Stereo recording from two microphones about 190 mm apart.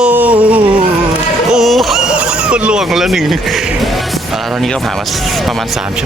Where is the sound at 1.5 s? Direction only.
Centre (ahead or behind).